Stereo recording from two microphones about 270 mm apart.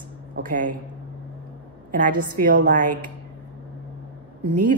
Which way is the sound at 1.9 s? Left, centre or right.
Right.